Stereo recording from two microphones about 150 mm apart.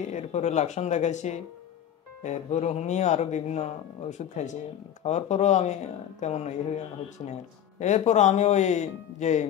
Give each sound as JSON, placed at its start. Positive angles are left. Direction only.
{"t": 0.0, "sound": "speech", "side_deg": 50}
{"t": 7.8, "sound": "speech", "side_deg": 50}